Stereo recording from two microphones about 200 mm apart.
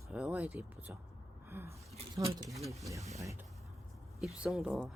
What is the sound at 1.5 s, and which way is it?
Gasp, 10° right (ahead or behind).